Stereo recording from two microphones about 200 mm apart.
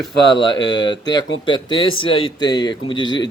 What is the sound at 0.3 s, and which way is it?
A man's voice, 20° left (ahead or behind).